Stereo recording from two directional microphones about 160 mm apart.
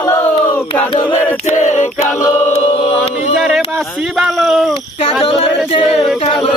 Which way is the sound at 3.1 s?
Centre (ahead or behind).